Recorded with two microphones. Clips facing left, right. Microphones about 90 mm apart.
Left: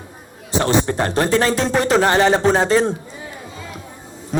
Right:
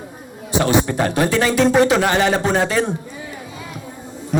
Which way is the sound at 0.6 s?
30° left (ahead or behind).